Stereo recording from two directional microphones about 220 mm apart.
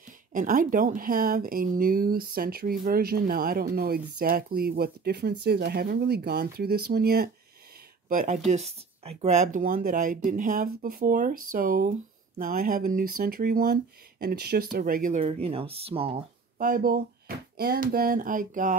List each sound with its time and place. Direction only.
0.3 s speech: 40° right (ahead or behind)
16.5 s speech: 40° right (ahead or behind)